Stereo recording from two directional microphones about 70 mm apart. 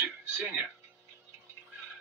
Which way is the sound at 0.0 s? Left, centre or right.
Right.